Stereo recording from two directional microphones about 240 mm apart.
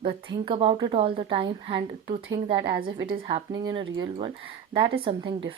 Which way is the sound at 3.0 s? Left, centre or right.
Right.